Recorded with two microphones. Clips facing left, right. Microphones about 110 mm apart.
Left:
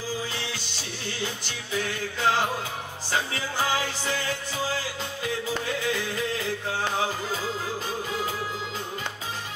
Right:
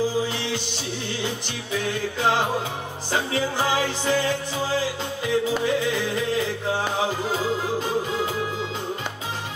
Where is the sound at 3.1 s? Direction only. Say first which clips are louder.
Right 5 dB; 25° right (ahead or behind).